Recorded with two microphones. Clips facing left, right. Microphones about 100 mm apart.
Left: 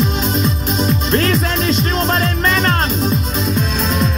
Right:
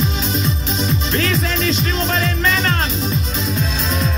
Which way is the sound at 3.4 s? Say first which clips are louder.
Left 5 dB; centre (ahead or behind).